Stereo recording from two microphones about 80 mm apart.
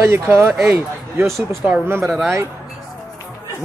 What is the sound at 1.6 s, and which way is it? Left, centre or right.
Speech, right.